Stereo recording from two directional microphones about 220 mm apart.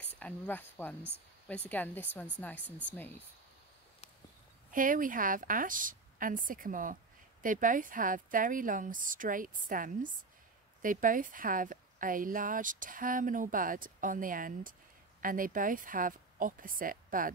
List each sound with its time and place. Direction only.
0.2 s speech: 10° left (ahead or behind)
4.6 s a woman's voice: 40° right (ahead or behind)